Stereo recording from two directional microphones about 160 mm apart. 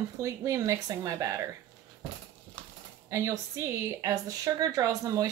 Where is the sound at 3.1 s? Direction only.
20° right (ahead or behind).